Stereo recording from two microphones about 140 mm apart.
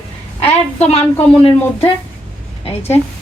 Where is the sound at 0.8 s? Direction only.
50° left (ahead or behind).